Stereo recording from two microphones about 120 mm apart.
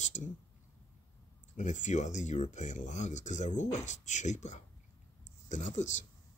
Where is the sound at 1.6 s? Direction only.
85° left.